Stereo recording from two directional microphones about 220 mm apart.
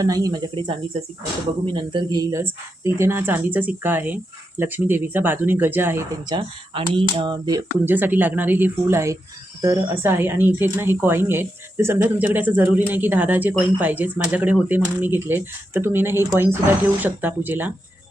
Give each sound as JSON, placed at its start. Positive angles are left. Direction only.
{"t": 0.0, "sound": "speech", "side_deg": -15}